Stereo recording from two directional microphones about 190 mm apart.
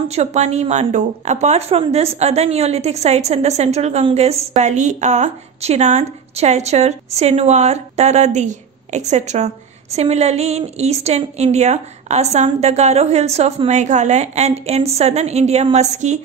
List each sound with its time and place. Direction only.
0.1 s a woman's voice: 35° right (ahead or behind)